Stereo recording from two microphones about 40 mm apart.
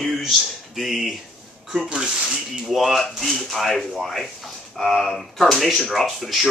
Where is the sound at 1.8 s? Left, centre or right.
Right.